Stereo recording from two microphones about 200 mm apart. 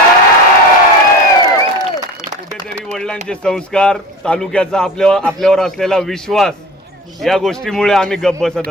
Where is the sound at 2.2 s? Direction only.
15° right (ahead or behind).